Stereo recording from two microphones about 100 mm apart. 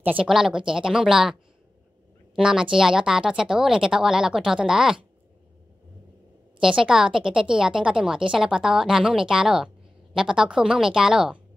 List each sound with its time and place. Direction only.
0.0 s speech: 15° right (ahead or behind)
6.6 s a woman's voice: 5° right (ahead or behind)